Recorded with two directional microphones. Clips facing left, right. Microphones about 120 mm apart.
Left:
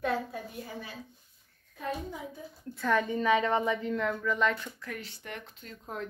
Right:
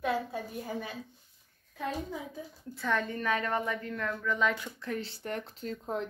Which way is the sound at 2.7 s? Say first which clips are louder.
Left 3 dB; centre (ahead or behind).